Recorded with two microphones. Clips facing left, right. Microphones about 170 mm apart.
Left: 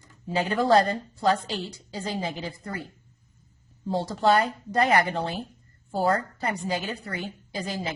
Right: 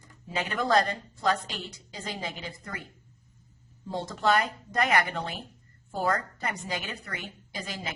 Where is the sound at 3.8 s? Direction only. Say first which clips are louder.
Left 4 dB; 30° left (ahead or behind).